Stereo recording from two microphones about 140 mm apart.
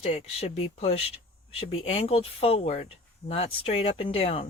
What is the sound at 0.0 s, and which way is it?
Speech, 45° left (ahead or behind).